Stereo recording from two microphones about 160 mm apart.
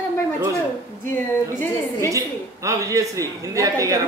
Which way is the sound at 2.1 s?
20° right (ahead or behind).